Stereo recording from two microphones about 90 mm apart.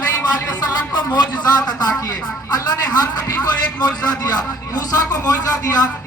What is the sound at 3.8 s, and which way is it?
Speech, 45° left (ahead or behind).